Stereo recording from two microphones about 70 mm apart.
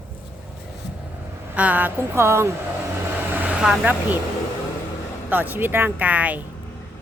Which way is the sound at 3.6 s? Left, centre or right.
Centre.